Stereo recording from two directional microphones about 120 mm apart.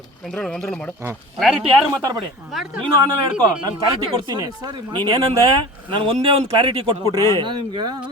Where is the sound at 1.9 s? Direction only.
30° right (ahead or behind).